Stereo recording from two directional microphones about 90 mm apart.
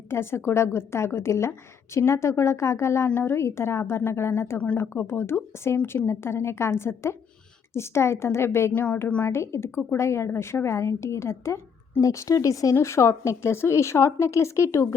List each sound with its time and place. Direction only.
0.1 s a woman's voice: 30° left (ahead or behind)
9.2 s a woman's voice: 30° left (ahead or behind)